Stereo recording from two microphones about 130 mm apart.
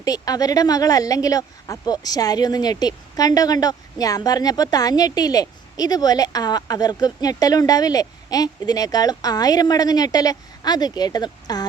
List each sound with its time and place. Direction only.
0.0 s speech: 30° left (ahead or behind)